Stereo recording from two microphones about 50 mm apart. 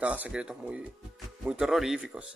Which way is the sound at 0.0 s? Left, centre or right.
Right.